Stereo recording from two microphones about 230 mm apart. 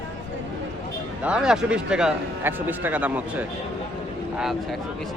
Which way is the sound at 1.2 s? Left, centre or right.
Centre.